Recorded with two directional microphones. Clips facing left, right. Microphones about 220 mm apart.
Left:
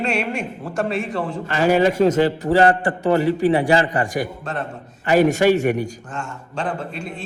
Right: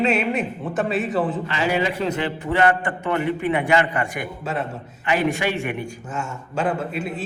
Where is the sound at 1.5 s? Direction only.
45° left (ahead or behind).